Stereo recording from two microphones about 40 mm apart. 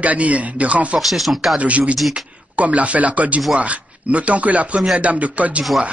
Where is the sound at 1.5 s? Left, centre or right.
Right.